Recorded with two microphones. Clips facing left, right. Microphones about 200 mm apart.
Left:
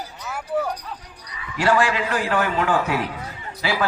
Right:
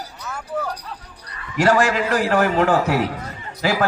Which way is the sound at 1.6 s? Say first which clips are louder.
Right 3 dB; 40° right (ahead or behind).